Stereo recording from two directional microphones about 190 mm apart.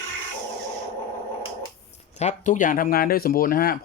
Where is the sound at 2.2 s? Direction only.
40° left (ahead or behind).